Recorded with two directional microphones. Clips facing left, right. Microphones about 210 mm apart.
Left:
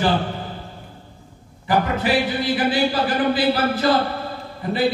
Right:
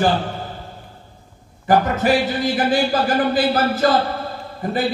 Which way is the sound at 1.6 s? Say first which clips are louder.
Right 4 dB; 45° right (ahead or behind).